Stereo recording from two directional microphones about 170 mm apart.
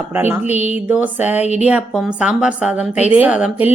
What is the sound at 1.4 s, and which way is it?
Speech, 40° left (ahead or behind).